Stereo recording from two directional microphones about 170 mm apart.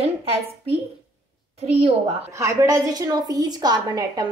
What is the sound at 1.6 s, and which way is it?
Speech, 40° right (ahead or behind).